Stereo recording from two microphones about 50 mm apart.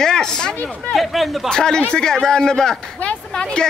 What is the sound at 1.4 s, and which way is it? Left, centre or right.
A man's voice, centre.